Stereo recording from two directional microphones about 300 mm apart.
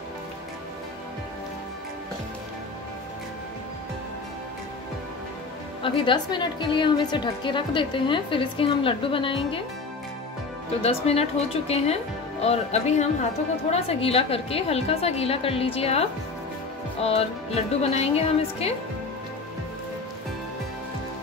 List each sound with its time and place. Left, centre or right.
5.8 s a woman's voice: centre
10.8 s a woman's voice: centre